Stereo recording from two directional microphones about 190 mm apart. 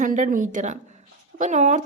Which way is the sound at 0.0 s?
45° right (ahead or behind).